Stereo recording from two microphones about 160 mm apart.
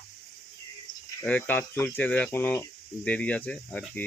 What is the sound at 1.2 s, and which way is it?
Speech, 10° left (ahead or behind).